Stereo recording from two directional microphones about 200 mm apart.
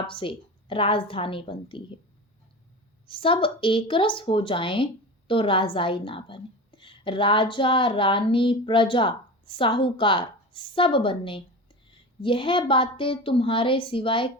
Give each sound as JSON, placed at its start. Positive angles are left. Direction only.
{"t": 0.1, "sound": "a woman's voice", "side_deg": 25}
{"t": 3.1, "sound": "a woman's voice", "side_deg": 25}